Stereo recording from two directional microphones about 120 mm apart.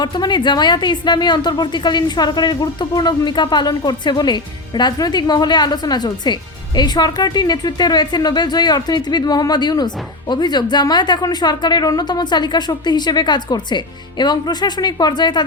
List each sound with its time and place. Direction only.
0.0 s a woman's voice: 40° left (ahead or behind)